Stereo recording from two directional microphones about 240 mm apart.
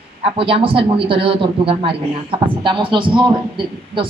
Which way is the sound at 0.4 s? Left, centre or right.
Right.